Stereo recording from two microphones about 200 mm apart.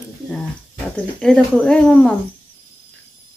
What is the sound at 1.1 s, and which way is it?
Speech, 5° left (ahead or behind).